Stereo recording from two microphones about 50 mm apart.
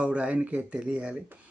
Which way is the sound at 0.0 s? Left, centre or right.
Right.